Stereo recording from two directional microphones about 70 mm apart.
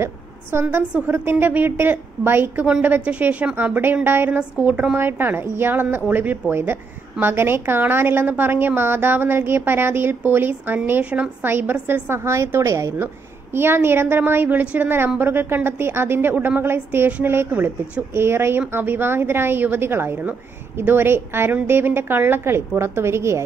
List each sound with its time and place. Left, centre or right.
0.0 s a woman's voice: right
12.9 s a woman's voice: right